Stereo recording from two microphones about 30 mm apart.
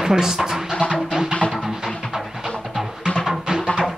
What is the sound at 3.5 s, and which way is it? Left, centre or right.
Music, right.